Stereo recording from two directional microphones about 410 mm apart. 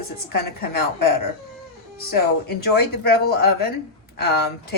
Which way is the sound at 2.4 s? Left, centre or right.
Left.